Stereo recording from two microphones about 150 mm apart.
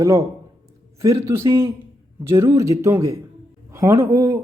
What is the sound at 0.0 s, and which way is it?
Speech, 20° right (ahead or behind).